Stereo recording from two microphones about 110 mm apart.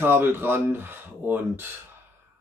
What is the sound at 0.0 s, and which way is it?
Speech, 20° right (ahead or behind).